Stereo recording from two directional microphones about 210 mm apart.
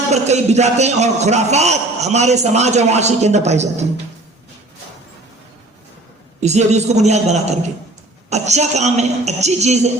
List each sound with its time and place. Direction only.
0.1 s a man's voice: 30° right (ahead or behind)
6.4 s a man's voice: 30° right (ahead or behind)